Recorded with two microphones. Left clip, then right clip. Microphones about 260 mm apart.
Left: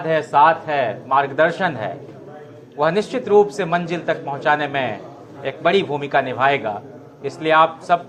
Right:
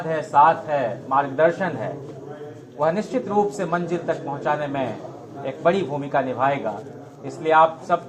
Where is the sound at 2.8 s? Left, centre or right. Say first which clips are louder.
Left 3 dB; left.